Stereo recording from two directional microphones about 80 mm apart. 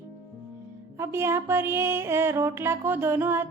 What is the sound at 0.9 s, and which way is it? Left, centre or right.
Speech, right.